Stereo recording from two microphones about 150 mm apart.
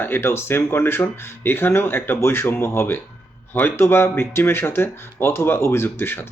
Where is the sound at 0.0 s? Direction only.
15° left (ahead or behind).